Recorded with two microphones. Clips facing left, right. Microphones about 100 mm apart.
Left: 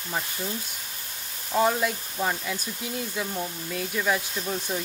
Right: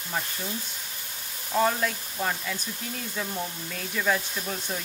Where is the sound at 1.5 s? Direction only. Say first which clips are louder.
Left 1 dB; 5° left (ahead or behind).